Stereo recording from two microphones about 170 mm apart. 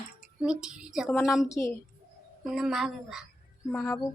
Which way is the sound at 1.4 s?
20° left (ahead or behind).